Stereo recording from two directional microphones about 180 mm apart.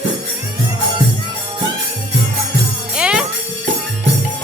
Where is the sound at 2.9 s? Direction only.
5° right (ahead or behind).